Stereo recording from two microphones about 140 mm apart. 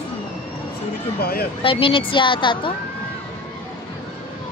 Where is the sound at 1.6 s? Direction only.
40° left (ahead or behind).